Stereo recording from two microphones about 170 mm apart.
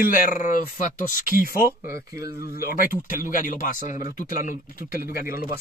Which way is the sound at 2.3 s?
60° left (ahead or behind).